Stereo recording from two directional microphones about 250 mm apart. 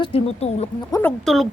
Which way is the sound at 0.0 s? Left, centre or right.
Left.